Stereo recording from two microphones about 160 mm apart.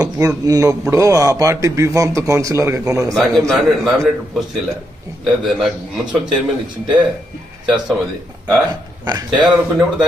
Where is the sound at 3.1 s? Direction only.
5° left (ahead or behind).